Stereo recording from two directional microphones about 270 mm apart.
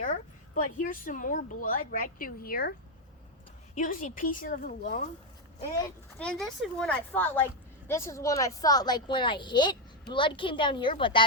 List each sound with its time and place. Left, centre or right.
0.0 s a woman's voice: left
3.8 s a woman's voice: left
6.4 s a woman's voice: centre